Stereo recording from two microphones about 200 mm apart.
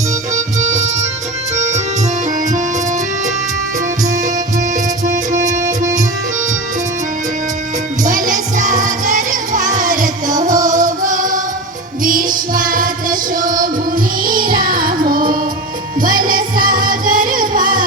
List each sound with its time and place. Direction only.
0.3 s music: 35° right (ahead or behind)
5.0 s music: 40° right (ahead or behind)
8.0 s music: 40° right (ahead or behind)